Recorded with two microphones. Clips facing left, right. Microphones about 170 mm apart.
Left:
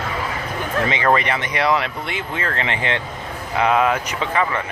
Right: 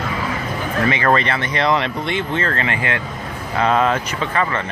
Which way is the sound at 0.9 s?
15° left (ahead or behind).